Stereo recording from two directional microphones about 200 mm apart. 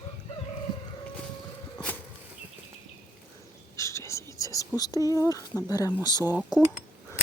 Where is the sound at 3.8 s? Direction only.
15° left (ahead or behind).